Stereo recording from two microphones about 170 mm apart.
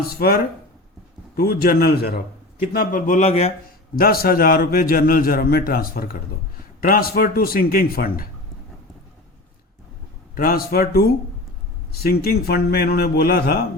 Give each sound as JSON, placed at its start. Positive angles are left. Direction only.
{"t": 0.0, "sound": "a man's voice", "side_deg": 65}
{"t": 2.7, "sound": "a man's voice", "side_deg": 55}
{"t": 3.9, "sound": "a man's voice", "side_deg": 60}
{"t": 10.3, "sound": "a man's voice", "side_deg": 60}